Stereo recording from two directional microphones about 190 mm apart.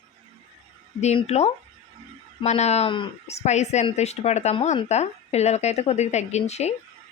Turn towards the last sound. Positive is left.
turn(degrees=35)  # may be behind; listen again after turning